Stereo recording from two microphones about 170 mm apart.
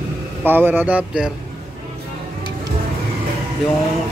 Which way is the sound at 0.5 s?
10° right (ahead or behind).